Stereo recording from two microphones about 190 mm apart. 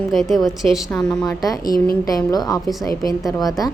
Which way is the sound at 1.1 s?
20° left (ahead or behind).